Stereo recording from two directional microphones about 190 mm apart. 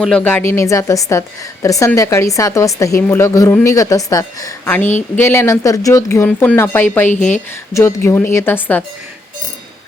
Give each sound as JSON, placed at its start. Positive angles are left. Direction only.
{"t": 0.0, "sound": "a woman's voice", "side_deg": 5}